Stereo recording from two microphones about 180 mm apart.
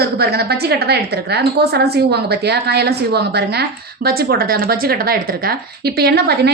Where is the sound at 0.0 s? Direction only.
60° right (ahead or behind).